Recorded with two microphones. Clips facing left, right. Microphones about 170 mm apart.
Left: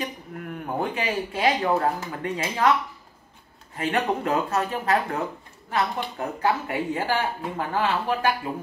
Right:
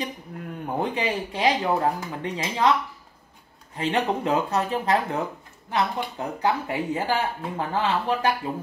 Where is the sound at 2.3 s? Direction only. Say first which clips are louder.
Even; 20° right (ahead or behind).